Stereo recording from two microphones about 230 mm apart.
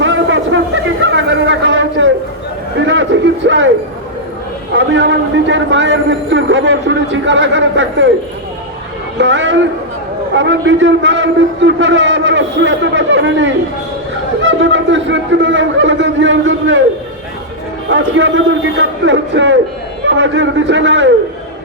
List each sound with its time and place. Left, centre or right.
0.0 s a sound: right
4.8 s a man's voice: right
9.1 s a man's voice: right
17.8 s a man's voice: right